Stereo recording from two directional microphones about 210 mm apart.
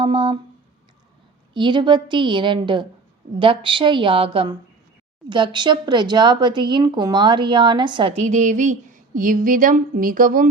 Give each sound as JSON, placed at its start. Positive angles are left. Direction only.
{"t": 0.0, "sound": "speech", "side_deg": -25}
{"t": 1.5, "sound": "speech", "side_deg": -20}